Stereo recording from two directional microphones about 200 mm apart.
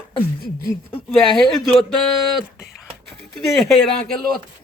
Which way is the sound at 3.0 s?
Centre (ahead or behind).